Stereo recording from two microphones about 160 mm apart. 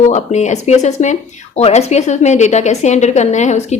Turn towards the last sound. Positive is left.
turn(degrees=45)  # may be behind; listen again after turning